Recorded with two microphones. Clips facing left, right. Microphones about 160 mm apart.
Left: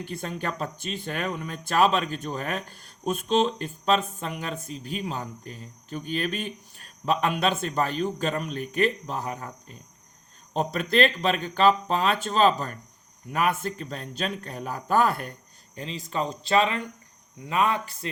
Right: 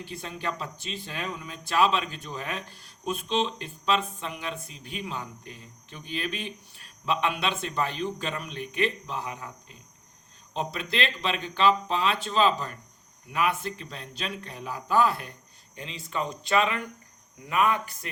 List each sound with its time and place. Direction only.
0.0 s speech: 50° left (ahead or behind)
15.7 s speech: 35° left (ahead or behind)